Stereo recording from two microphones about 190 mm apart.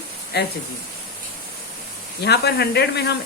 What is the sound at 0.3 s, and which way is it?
Speech, 60° left (ahead or behind).